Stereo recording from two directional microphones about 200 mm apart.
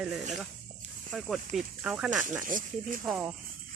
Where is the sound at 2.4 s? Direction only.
40° right (ahead or behind).